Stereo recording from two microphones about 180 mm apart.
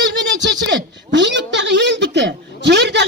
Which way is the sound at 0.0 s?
80° right.